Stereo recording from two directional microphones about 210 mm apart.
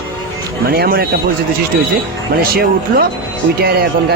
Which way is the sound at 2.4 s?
45° right (ahead or behind).